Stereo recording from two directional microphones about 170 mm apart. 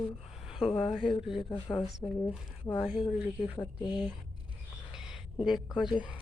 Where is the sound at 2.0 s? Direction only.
20° left (ahead or behind).